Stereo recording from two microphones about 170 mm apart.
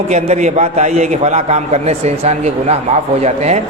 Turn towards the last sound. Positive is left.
turn(degrees=-40)  # may be behind; listen again after turning